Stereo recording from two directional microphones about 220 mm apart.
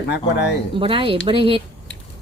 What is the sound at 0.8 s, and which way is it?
Speech, 25° right (ahead or behind).